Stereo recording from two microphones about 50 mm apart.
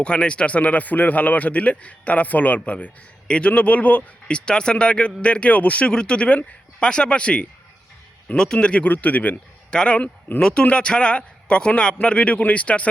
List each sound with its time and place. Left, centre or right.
0.0 s a man's voice: left
5.9 s a man's voice: centre
8.5 s speech: left
9.6 s a man's voice: centre